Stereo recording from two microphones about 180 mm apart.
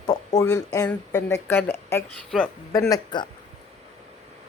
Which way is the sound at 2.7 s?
15° left (ahead or behind).